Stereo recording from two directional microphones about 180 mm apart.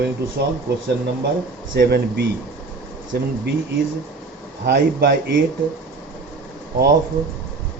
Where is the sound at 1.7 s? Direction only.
60° right (ahead or behind).